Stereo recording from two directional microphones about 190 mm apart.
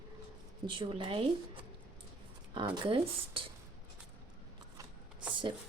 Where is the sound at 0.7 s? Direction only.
25° right (ahead or behind).